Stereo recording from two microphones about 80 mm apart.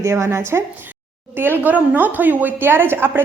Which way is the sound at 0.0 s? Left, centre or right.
Right.